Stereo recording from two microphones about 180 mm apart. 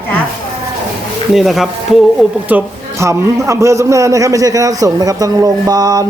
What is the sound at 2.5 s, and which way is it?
A man's voice, 15° right (ahead or behind).